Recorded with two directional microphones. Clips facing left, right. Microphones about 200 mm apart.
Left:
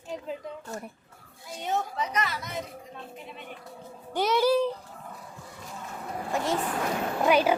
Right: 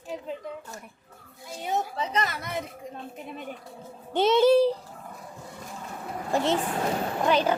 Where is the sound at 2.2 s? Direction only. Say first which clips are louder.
Right 2 dB; 55° right (ahead or behind).